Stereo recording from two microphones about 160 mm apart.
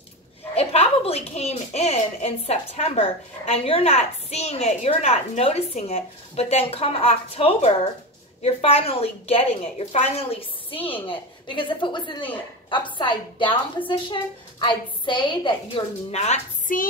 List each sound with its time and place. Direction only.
0.6 s a woman's voice: 40° left (ahead or behind)
14.6 s a woman's voice: 30° left (ahead or behind); by 16.8 s 50° left (ahead or behind)